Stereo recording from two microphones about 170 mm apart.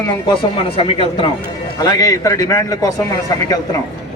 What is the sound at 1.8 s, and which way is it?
A man's voice, 20° left (ahead or behind).